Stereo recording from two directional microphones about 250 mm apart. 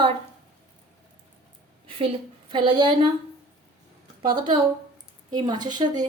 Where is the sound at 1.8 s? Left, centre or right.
Right.